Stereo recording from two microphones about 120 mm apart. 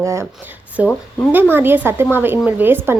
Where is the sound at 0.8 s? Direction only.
10° right (ahead or behind).